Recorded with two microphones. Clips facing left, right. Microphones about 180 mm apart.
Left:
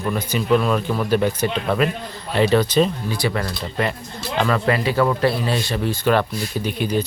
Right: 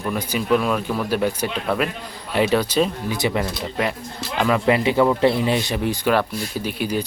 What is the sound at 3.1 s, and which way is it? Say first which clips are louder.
Speech: right 1 dB; 20° right (ahead or behind).